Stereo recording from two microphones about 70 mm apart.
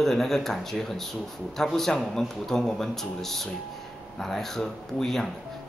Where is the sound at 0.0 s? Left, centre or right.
Centre.